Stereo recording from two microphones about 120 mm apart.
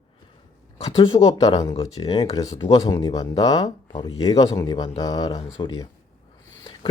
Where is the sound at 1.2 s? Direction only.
30° left (ahead or behind).